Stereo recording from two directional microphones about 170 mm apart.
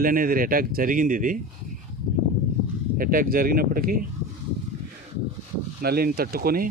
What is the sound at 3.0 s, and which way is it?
Speech, 55° right (ahead or behind).